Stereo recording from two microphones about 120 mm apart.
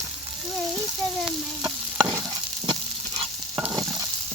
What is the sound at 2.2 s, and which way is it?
Stir, 30° right (ahead or behind).